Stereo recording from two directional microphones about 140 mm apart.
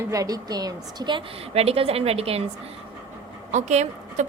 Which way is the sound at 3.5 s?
55° right (ahead or behind).